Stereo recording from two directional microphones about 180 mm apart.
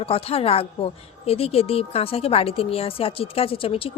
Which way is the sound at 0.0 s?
30° left (ahead or behind).